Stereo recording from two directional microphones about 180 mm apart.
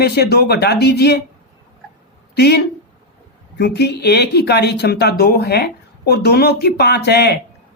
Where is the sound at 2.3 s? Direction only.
65° left (ahead or behind).